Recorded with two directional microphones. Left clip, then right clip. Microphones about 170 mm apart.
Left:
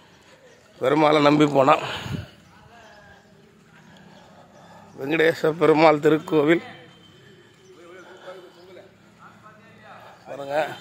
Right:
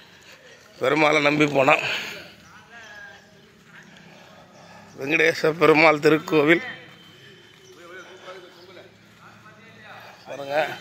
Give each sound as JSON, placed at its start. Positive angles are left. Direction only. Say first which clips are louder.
{"t": 0.7, "sound": "a man's voice", "louder": "left 1 dB", "side_deg": 15}
{"t": 1.2, "sound": "a man's voice", "louder": "left 2 dB", "side_deg": 35}
{"t": 4.9, "sound": "a man's voice", "louder": "even", "side_deg": 20}
{"t": 10.3, "sound": "a sound", "louder": "right 1 dB", "side_deg": 10}